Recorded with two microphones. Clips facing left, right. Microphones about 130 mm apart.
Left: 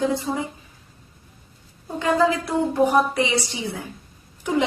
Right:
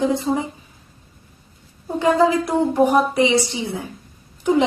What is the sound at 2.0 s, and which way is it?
A woman's voice, 20° right (ahead or behind).